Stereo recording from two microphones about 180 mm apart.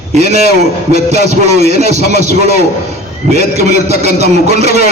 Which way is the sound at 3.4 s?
40° right (ahead or behind).